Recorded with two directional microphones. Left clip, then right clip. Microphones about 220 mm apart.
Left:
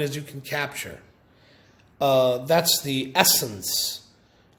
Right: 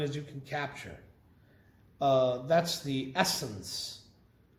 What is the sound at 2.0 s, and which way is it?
A man's voice, 45° left (ahead or behind).